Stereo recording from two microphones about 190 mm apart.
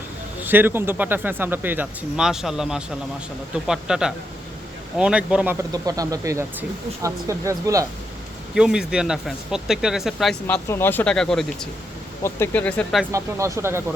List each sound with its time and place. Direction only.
0.4 s speech: 10° right (ahead or behind)
5.7 s speech: 20° right (ahead or behind)
8.5 s speech: 5° right (ahead or behind)
10.4 s speech: 10° left (ahead or behind)
13.1 s speech: 15° right (ahead or behind)